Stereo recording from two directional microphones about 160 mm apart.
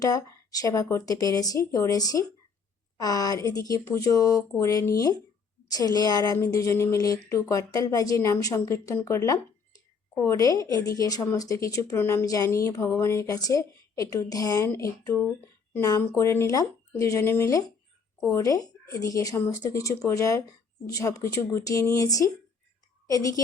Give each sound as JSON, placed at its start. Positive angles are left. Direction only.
{"t": 0.0, "sound": "a woman's voice", "side_deg": 20}